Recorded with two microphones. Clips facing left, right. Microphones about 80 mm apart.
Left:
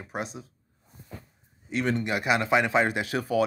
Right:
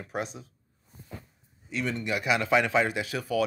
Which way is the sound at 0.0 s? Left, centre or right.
Centre.